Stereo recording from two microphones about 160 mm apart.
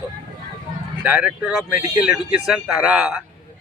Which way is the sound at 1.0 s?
10° right (ahead or behind).